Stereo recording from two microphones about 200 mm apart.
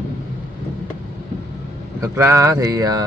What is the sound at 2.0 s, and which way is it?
Speech, 15° right (ahead or behind).